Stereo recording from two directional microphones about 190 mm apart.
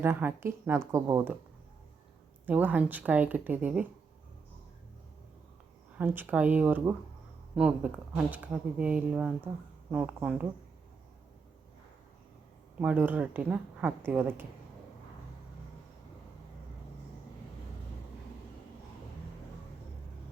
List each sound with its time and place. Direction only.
0.0 s speech: 10° right (ahead or behind)
2.5 s speech: 10° right (ahead or behind)
6.0 s speech: 10° right (ahead or behind)
12.8 s speech: 10° right (ahead or behind)